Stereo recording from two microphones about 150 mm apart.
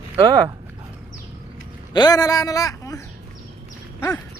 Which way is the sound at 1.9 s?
25° left (ahead or behind).